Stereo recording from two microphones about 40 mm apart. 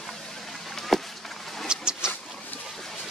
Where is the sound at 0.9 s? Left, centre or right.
Centre.